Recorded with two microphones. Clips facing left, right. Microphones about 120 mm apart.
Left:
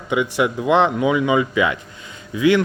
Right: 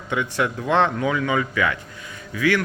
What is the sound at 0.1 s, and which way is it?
Speech, 10° left (ahead or behind).